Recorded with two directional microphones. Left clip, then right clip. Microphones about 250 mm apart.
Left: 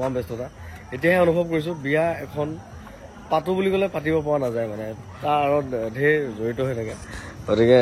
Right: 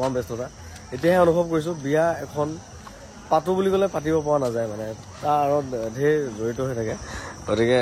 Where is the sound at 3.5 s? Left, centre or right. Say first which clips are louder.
Right 1 dB; centre.